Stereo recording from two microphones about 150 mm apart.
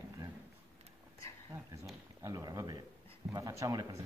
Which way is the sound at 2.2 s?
25° right (ahead or behind).